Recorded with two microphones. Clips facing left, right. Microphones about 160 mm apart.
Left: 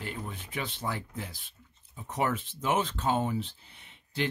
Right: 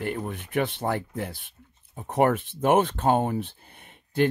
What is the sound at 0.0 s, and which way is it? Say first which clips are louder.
Speech: right 8 dB; 60° right (ahead or behind).